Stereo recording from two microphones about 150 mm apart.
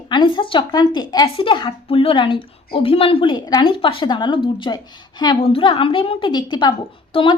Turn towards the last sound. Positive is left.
turn(degrees=35)  # may be behind; listen again after turning